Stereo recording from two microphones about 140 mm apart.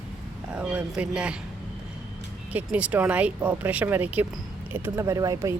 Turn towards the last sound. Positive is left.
turn(degrees=-25)  # may be behind; listen again after turning